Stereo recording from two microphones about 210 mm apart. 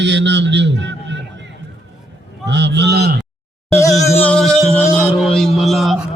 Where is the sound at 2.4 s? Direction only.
55° right (ahead or behind).